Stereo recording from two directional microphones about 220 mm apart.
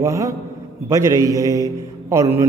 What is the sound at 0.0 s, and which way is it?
A man's voice, 15° right (ahead or behind).